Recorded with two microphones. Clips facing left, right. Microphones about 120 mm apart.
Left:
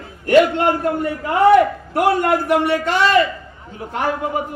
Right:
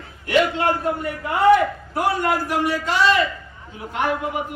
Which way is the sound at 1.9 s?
60° left (ahead or behind).